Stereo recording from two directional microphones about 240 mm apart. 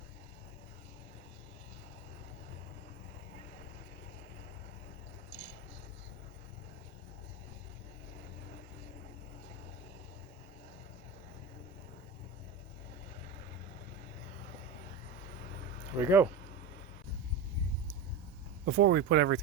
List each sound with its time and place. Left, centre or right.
5.3 s a sound: left
16.0 s speech: centre
18.6 s speech: right